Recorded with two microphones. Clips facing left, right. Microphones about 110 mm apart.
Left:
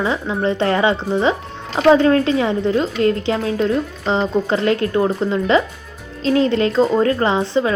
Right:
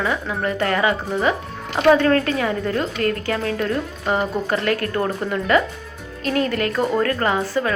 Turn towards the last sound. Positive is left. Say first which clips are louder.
# left 3 dB
turn(degrees=20)  # may be behind; listen again after turning